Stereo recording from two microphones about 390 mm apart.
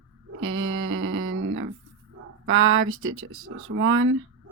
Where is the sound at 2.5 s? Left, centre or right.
Right.